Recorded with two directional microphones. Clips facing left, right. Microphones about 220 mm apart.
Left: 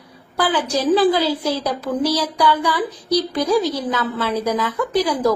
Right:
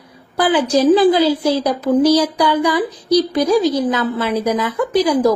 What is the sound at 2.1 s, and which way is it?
Speech, 15° right (ahead or behind).